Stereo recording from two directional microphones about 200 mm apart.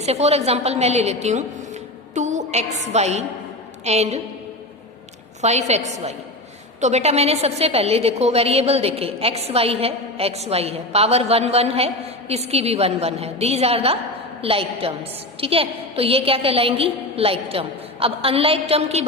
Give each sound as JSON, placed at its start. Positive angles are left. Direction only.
{"t": 0.0, "sound": "a woman's voice", "side_deg": -30}
{"t": 5.4, "sound": "a woman's voice", "side_deg": -35}